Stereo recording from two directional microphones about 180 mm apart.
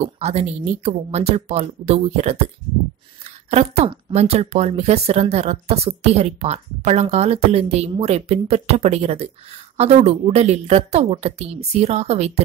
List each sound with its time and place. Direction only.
0.0 s speech: 35° right (ahead or behind)